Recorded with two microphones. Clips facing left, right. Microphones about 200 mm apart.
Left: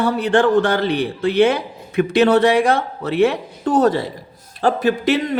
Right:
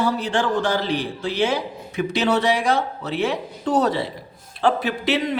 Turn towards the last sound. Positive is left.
turn(degrees=45)  # may be behind; listen again after turning